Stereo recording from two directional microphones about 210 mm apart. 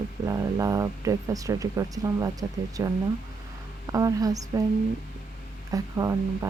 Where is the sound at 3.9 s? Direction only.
15° right (ahead or behind).